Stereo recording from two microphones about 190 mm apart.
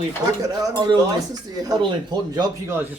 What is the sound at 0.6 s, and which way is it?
Speech, 20° right (ahead or behind).